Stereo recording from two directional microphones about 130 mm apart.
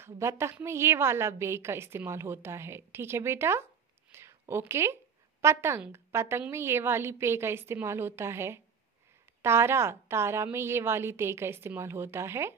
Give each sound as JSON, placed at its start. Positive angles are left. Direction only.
{"t": 0.0, "sound": "a woman's voice", "side_deg": -20}
{"t": 4.1, "sound": "a sound", "side_deg": -20}
{"t": 5.4, "sound": "a woman's voice", "side_deg": -20}